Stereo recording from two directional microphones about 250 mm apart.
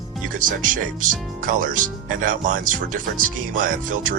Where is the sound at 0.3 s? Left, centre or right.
Right.